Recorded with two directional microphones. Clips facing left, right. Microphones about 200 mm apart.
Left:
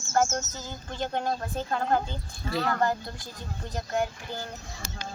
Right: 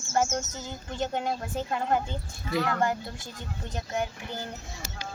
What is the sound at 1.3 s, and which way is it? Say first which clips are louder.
Speech: left 1 dB; 15° right (ahead or behind).